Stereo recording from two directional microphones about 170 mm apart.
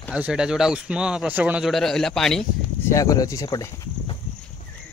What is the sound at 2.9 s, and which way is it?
Speech, 20° left (ahead or behind).